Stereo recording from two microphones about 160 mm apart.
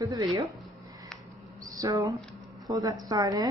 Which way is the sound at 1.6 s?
20° right (ahead or behind).